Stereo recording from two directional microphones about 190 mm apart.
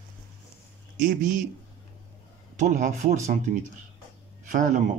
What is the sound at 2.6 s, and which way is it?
Speech, 40° right (ahead or behind).